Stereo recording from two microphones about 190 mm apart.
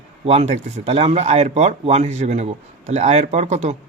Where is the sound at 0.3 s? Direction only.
35° right (ahead or behind).